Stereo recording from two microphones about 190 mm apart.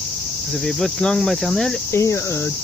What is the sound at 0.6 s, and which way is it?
Cricket, 5° left (ahead or behind).